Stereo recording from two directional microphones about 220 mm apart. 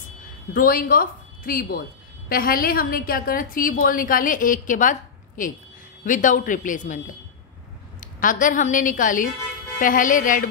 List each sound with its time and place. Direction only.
0.5 s speech: 40° left (ahead or behind)